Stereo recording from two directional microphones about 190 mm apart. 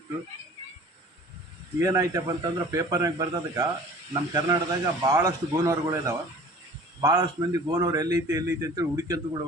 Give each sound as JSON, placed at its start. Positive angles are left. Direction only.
{"t": 1.8, "sound": "a man's voice", "side_deg": -15}